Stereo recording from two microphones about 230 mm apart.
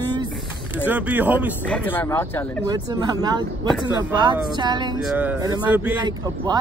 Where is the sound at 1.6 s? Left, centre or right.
Centre.